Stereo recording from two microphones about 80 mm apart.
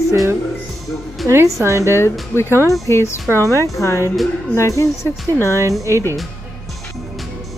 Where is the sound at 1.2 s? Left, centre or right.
Right.